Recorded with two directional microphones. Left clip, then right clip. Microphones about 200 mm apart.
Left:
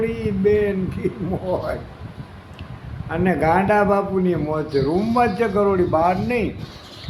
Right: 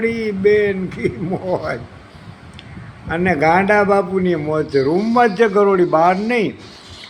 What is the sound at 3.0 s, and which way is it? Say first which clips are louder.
A man's voice: right 4 dB; 10° right (ahead or behind).